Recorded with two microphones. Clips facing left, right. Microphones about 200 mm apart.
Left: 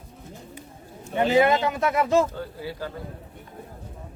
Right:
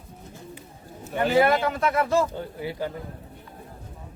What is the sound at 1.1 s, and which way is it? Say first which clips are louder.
Speech: left 1 dB; 20° left (ahead or behind).